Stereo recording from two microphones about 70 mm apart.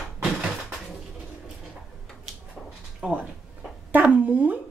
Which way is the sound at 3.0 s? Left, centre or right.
Centre.